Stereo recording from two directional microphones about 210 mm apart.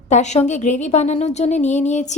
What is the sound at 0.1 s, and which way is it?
A woman's voice, 35° left (ahead or behind).